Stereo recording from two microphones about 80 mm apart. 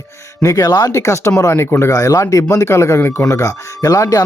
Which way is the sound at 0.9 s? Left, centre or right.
Left.